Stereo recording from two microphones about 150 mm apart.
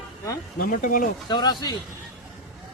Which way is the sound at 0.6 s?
70° left (ahead or behind).